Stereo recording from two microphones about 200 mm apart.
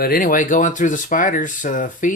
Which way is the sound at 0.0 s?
45° left (ahead or behind).